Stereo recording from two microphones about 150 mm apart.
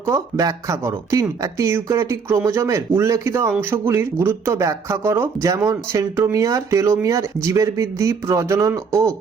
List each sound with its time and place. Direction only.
0.0 s speech: 20° right (ahead or behind)